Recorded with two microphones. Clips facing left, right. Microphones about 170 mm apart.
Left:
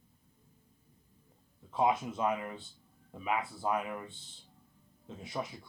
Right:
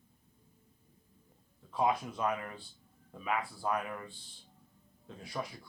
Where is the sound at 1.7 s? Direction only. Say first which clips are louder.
Left 2 dB; 25° left (ahead or behind).